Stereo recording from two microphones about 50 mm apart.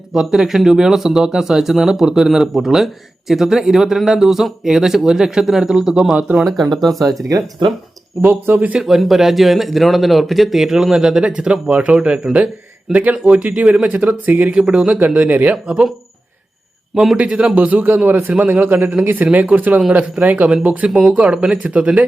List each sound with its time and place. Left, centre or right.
0.1 s speech: centre
6.4 s speech: centre
8.2 s speech: right
8.8 s speech: centre; by 13.7 s right
13.8 s speech: right
14.6 s speech: centre
15.6 s speech: centre
16.9 s a man's voice: centre
17.2 s speech: right
17.5 s speech: right
18.6 s speech: right
19.1 s speech: right